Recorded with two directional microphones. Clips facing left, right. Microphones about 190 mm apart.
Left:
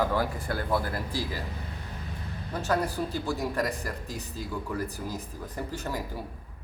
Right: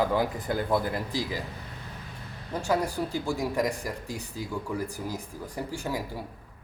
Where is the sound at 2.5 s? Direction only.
15° right (ahead or behind).